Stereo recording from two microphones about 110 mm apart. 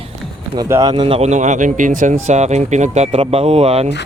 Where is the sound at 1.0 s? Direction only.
55° right (ahead or behind).